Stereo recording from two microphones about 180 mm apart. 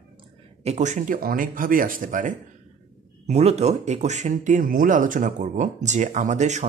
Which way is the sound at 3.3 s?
35° right (ahead or behind).